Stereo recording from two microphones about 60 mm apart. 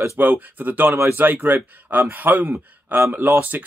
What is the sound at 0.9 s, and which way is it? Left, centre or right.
Speech, right.